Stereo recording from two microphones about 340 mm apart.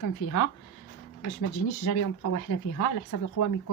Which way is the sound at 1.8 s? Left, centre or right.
Left.